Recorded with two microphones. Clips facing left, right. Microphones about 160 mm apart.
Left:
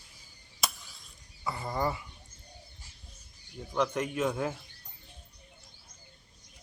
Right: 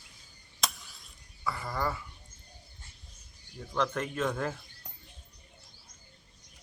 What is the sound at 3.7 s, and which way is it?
Speech, 10° left (ahead or behind).